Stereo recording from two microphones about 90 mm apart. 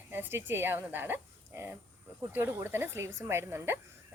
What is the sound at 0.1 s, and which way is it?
Speech, 25° right (ahead or behind).